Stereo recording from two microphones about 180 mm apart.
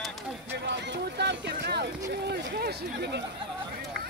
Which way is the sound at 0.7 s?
75° right (ahead or behind).